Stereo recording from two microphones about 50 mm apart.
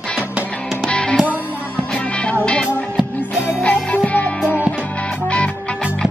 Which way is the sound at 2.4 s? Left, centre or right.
Left.